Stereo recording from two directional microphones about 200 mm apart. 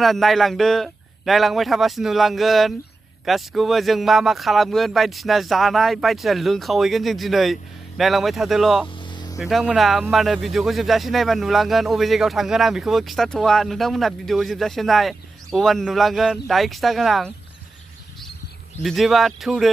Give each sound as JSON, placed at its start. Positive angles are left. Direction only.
{"t": 0.0, "sound": "a man's voice", "side_deg": 0}
{"t": 8.8, "sound": "a sound", "side_deg": 20}
{"t": 9.4, "sound": "a man's voice", "side_deg": 0}
{"t": 18.8, "sound": "a man's voice", "side_deg": 0}